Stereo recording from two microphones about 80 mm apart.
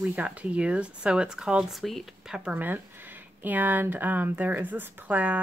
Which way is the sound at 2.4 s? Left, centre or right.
Right.